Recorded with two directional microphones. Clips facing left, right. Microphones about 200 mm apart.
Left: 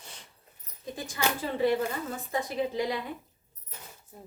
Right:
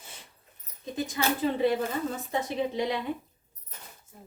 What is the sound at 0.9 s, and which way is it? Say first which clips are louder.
Speech: right 10 dB; 20° right (ahead or behind).